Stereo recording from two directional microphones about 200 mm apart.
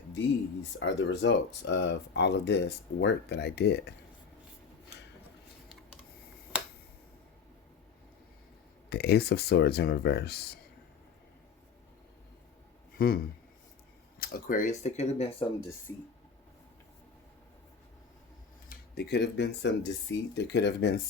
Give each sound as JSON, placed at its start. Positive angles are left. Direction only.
{"t": 0.8, "sound": "speech", "side_deg": 60}
{"t": 8.9, "sound": "speech", "side_deg": 55}
{"t": 13.0, "sound": "speech", "side_deg": 50}
{"t": 15.9, "sound": "speech", "side_deg": 10}
{"t": 18.7, "sound": "speech", "side_deg": 55}